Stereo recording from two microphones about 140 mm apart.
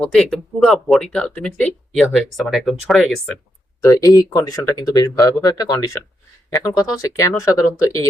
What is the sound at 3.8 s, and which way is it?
Speech, 25° left (ahead or behind).